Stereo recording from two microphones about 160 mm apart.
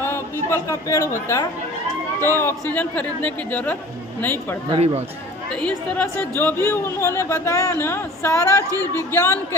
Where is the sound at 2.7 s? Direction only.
10° left (ahead or behind).